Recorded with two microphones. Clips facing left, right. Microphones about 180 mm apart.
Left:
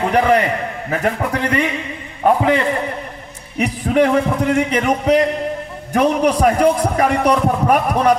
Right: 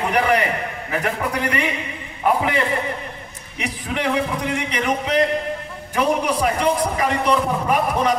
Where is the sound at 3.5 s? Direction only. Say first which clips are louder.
Left 11 dB; 50° left (ahead or behind).